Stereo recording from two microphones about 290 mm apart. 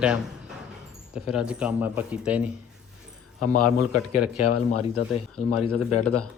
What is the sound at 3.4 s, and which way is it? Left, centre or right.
Speech, left.